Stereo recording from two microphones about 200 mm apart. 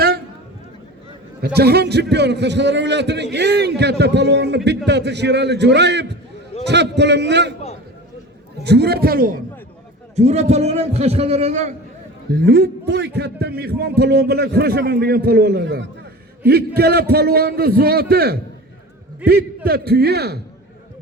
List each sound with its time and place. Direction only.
1.5 s a man's voice: 55° right (ahead or behind)
8.6 s a man's voice: 55° right (ahead or behind)
10.2 s a man's voice: 35° right (ahead or behind)
12.3 s a man's voice: 50° right (ahead or behind)